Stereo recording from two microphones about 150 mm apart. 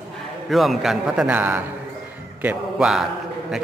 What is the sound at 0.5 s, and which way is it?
A man's voice, centre (ahead or behind).